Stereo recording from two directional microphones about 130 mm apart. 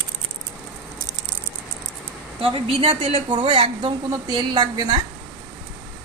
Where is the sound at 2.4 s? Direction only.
45° right (ahead or behind); by 5.0 s 30° right (ahead or behind).